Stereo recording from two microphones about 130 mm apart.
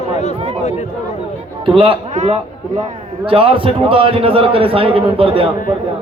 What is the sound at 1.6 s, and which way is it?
Speech, 40° right (ahead or behind).